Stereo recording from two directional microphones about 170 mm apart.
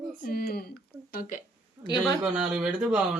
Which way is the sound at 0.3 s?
65° left (ahead or behind).